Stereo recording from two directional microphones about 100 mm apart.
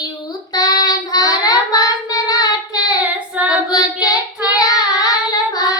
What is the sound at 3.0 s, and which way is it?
Child singing, 15° right (ahead or behind).